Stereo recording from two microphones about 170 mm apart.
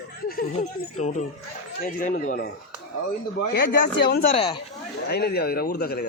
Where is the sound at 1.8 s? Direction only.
55° left (ahead or behind).